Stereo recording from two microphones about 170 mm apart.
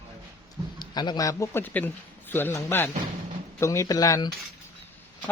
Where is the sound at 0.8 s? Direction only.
25° left (ahead or behind).